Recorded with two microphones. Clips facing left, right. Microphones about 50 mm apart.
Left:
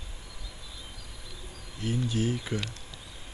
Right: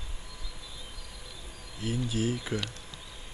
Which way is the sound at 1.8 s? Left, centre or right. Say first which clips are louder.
Left 1 dB; centre.